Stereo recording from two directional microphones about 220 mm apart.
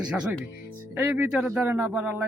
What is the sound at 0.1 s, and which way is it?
A man's voice, 5° right (ahead or behind).